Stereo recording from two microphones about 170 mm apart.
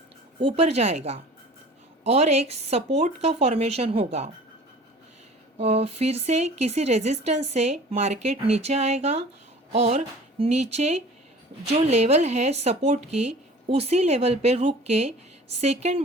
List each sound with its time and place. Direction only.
0.3 s speech: 40° right (ahead or behind)
5.5 s speech: 35° right (ahead or behind)